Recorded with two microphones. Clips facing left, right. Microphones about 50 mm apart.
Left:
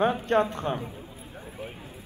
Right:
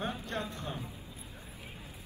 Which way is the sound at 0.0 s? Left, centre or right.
Left.